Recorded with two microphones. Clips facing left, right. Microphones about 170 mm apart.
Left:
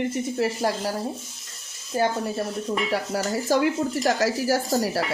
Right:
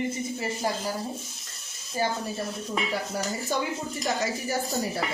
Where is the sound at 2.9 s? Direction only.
80° left.